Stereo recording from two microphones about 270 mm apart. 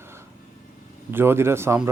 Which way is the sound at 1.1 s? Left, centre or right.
Centre.